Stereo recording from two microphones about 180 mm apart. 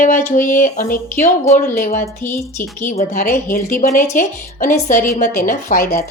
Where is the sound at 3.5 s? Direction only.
45° left (ahead or behind).